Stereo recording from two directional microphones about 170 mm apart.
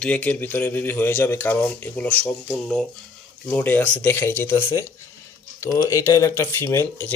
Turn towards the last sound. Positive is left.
turn(degrees=15)  # may be behind; listen again after turning